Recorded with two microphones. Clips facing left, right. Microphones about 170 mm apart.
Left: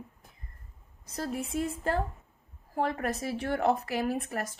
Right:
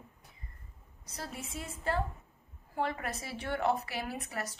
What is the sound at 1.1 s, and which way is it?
A woman's voice, 50° left (ahead or behind).